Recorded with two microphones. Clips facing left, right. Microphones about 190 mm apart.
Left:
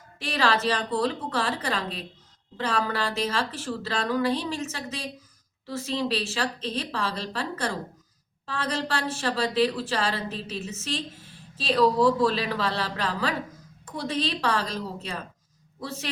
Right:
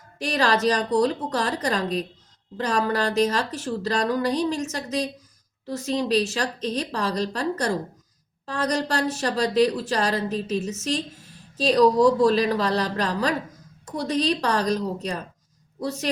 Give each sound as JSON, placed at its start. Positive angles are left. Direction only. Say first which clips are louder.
{"t": 0.2, "sound": "a woman's voice", "louder": "right 3 dB", "side_deg": -40}